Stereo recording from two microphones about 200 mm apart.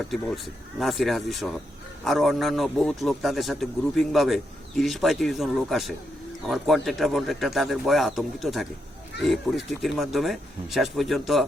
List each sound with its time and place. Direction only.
0.0 s a man's voice: centre (ahead or behind)